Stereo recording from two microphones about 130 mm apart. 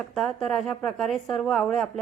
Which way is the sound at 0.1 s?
Centre (ahead or behind).